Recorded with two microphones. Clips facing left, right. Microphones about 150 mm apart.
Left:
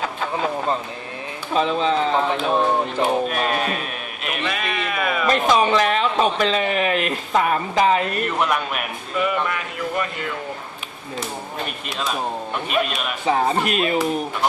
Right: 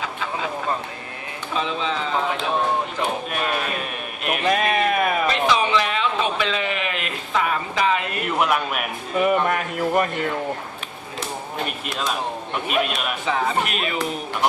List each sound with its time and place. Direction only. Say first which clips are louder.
0.0 s a sound: left 4 dB; 45° left (ahead or behind)
1.5 s speech: left 6 dB; 40° left (ahead or behind)
3.0 s speech: left 5 dB; centre (ahead or behind)
4.4 s speech: right 7 dB; 45° right (ahead or behind)
5.2 s speech: left 3 dB; 45° left (ahead or behind)
8.2 s speech: even; 5° right (ahead or behind)
9.1 s speech: right 3 dB; 45° right (ahead or behind)
11.6 s speech: right 1 dB; centre (ahead or behind)
13.2 s speech: left 4 dB; 35° left (ahead or behind)